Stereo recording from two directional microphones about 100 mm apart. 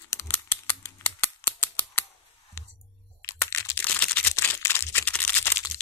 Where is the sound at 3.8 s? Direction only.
15° left (ahead or behind).